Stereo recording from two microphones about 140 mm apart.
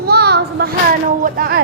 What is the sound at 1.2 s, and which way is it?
Speech, 90° right.